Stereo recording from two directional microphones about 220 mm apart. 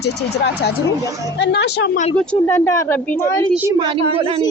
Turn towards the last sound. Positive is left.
turn(degrees=-25)  # may be behind; listen again after turning